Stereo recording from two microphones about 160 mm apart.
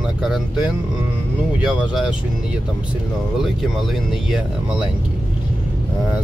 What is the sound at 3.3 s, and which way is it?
Speech, centre (ahead or behind).